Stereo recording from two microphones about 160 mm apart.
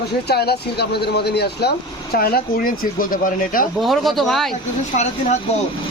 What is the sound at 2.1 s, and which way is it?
Speech, 70° left (ahead or behind).